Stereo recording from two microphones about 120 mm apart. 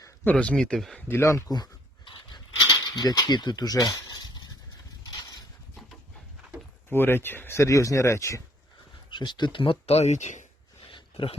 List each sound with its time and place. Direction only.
0.3 s speech: 10° left (ahead or behind)
1.0 s dog: 20° left (ahead or behind); by 2.4 s 35° left (ahead or behind)
2.8 s speech: 35° left (ahead or behind)
6.9 s speech: 20° left (ahead or behind)
9.0 s speech: 40° left (ahead or behind); by 10.4 s 80° left
10.9 s a sound: 45° left (ahead or behind)